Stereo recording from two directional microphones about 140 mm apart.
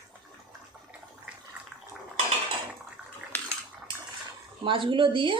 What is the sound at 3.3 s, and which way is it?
Cutlery, 15° left (ahead or behind).